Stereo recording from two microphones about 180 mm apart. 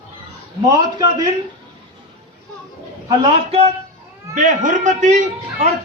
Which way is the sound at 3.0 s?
30° right (ahead or behind).